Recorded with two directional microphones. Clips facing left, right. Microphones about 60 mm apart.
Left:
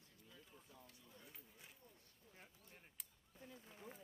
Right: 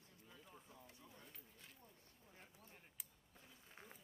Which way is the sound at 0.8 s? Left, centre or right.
Centre.